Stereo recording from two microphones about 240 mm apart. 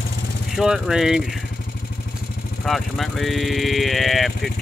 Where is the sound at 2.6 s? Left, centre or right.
Centre.